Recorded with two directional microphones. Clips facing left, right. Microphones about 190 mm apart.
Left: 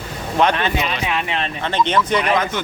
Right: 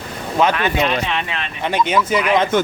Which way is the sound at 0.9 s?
5° left (ahead or behind).